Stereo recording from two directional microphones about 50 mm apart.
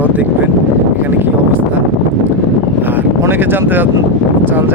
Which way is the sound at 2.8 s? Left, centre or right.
Right.